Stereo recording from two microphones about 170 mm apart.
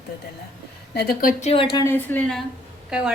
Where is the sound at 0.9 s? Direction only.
65° left (ahead or behind).